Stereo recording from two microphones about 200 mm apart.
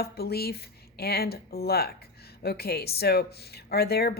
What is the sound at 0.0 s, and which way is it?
Speech, 50° left (ahead or behind).